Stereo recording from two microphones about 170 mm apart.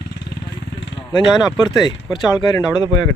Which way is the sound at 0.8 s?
25° left (ahead or behind).